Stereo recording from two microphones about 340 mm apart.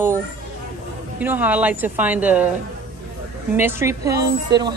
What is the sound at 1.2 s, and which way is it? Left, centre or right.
Speech, centre.